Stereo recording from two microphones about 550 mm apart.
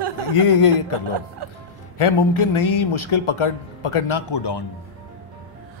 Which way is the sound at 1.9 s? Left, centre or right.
Left.